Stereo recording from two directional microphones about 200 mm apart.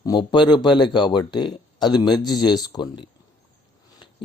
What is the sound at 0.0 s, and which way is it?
Speech, 20° left (ahead or behind).